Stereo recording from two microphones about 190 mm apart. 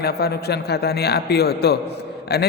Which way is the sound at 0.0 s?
55° left (ahead or behind).